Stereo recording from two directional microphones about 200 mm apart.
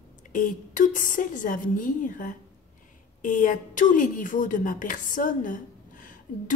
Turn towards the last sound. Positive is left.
turn(degrees=40)  # may be behind; listen again after turning